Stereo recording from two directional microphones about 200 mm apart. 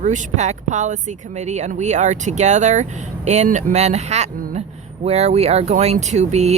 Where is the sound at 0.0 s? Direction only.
40° right (ahead or behind).